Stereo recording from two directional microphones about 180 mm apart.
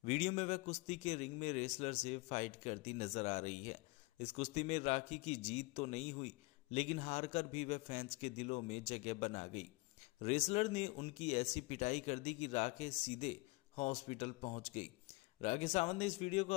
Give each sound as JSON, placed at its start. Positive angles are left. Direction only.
{"t": 0.0, "sound": "a man's voice", "side_deg": 35}